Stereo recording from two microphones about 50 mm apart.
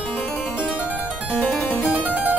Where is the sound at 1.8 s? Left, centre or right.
Right.